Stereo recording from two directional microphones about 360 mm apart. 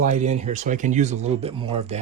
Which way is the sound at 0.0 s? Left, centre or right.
Centre.